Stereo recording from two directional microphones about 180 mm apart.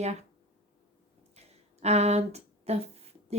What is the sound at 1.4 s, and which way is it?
Speech, 35° right (ahead or behind).